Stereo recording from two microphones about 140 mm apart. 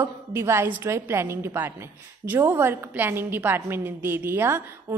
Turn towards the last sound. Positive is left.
turn(degrees=-20)  # may be behind; listen again after turning